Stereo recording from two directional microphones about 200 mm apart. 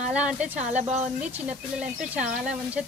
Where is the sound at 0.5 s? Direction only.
35° right (ahead or behind).